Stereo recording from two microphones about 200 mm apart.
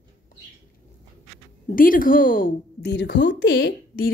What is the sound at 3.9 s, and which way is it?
Speech, 45° left (ahead or behind).